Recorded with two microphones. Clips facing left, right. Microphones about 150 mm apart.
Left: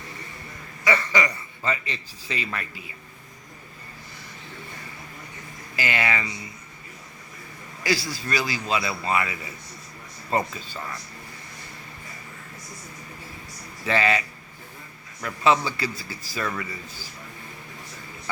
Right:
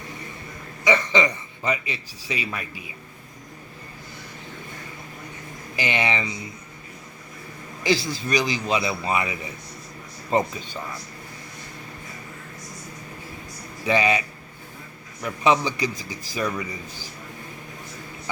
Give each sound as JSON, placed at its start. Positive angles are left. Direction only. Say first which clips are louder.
{"t": 0.9, "sound": "a man's voice", "louder": "right 3 dB", "side_deg": -20}
{"t": 5.7, "sound": "a man's voice", "louder": "right 2 dB", "side_deg": -20}
{"t": 7.9, "sound": "a man's voice", "louder": "right 3 dB", "side_deg": -20}
{"t": 13.8, "sound": "a man's voice", "louder": "right 2 dB", "side_deg": -15}